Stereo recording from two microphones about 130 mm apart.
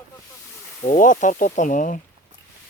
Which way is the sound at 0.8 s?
85° left.